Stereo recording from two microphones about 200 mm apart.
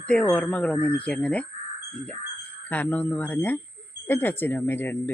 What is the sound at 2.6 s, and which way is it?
Speech, 10° left (ahead or behind).